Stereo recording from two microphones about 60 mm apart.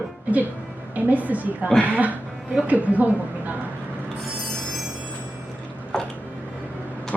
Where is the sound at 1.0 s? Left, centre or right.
Right.